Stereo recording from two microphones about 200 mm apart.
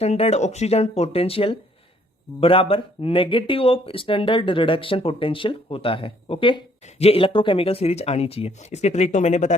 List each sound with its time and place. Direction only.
0.0 s speech: 30° left (ahead or behind)